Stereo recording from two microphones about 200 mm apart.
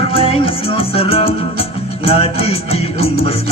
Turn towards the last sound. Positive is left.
turn(degrees=30)  # may be behind; listen again after turning